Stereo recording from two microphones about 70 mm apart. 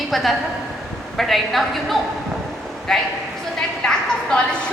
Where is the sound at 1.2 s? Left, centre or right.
Centre.